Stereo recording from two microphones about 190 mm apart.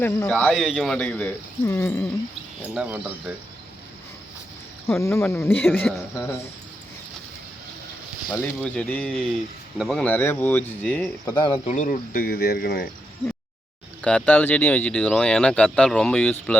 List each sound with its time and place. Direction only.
0.0 s speech: 10° left (ahead or behind)
2.6 s speech: 10° right (ahead or behind)
4.9 s speech: 15° left (ahead or behind)
8.3 s speech: 5° left (ahead or behind)
11.3 s speech: 25° left (ahead or behind)
11.7 s speech: 40° left (ahead or behind)
14.0 s speech: 5° left (ahead or behind)